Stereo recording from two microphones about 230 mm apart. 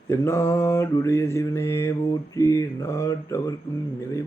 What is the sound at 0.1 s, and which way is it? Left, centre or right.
Mantra, centre.